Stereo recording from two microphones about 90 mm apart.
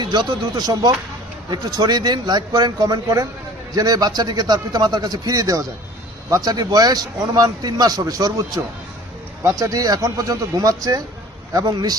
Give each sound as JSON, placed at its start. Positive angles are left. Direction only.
{"t": 0.0, "sound": "a man's voice", "side_deg": -50}